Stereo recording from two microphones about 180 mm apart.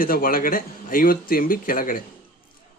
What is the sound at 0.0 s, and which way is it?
Speech, 55° left (ahead or behind).